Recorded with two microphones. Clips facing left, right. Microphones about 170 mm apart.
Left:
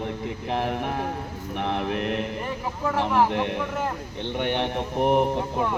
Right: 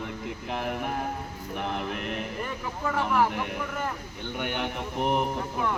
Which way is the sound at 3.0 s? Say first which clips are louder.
Left 3 dB; 25° left (ahead or behind).